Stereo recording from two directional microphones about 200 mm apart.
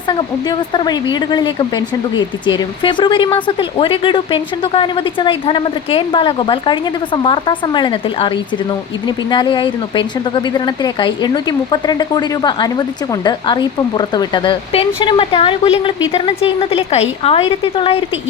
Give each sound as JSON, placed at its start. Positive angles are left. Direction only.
{"t": 0.7, "sound": "speech", "side_deg": 20}